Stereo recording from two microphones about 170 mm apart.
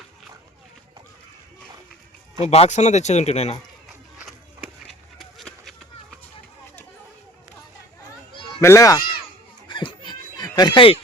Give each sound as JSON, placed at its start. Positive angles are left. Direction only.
{"t": 2.4, "sound": "speech", "side_deg": 40}
{"t": 4.2, "sound": "crowd", "side_deg": -5}
{"t": 5.1, "sound": "run", "side_deg": 0}
{"t": 8.6, "sound": "speech", "side_deg": 20}
{"t": 9.6, "sound": "snicker", "side_deg": 25}